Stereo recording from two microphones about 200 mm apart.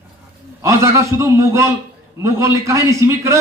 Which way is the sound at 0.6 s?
15° right (ahead or behind).